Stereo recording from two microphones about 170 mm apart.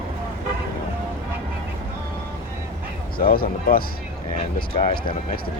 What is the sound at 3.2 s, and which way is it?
Speech, 60° left (ahead or behind).